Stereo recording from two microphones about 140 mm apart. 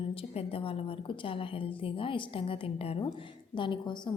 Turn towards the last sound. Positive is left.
turn(degrees=35)  # may be behind; listen again after turning